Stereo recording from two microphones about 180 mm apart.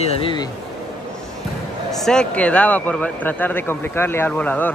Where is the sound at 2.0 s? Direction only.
5° left (ahead or behind).